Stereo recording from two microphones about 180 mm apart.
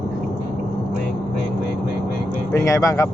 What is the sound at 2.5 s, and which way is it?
Speech, 15° left (ahead or behind).